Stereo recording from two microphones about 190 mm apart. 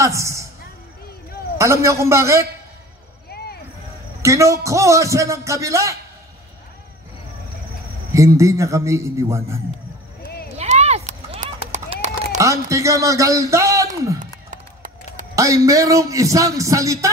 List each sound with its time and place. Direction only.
0.0 s music: 15° right (ahead or behind)
1.6 s a man's voice: 15° right (ahead or behind)
4.2 s a man's voice: 15° right (ahead or behind)
8.1 s a man's voice: 15° right (ahead or behind)
10.6 s run: 35° right (ahead or behind)
12.4 s a man's voice: 15° right (ahead or behind)
14.2 s a sound: 40° right (ahead or behind)
15.3 s a man's voice: 15° right (ahead or behind)